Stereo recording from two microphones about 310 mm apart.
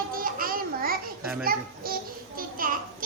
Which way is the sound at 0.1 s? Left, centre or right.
Right.